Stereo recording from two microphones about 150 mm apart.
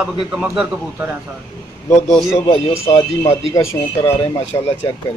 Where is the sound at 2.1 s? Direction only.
Centre (ahead or behind).